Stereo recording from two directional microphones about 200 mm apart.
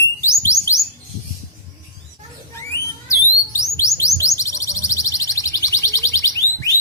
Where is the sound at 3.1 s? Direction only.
15° left (ahead or behind).